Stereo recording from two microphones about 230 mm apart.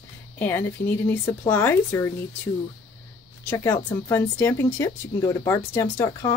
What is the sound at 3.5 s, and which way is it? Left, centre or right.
Speech, centre.